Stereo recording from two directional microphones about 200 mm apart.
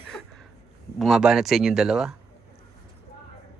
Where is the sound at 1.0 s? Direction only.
Centre (ahead or behind).